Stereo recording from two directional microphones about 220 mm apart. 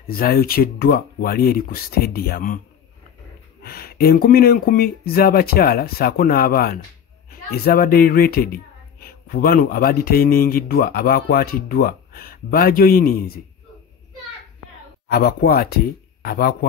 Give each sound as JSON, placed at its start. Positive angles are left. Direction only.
{"t": 0.2, "sound": "speech", "side_deg": 40}
{"t": 3.6, "sound": "speech", "side_deg": 45}
{"t": 15.0, "sound": "speech", "side_deg": 45}